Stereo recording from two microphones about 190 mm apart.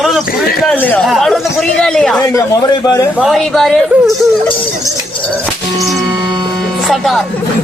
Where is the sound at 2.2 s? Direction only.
15° left (ahead or behind).